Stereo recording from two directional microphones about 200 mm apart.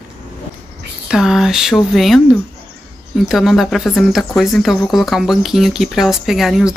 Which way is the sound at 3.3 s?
Centre (ahead or behind).